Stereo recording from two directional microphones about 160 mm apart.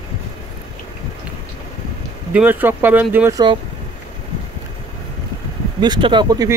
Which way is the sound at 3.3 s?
25° right (ahead or behind).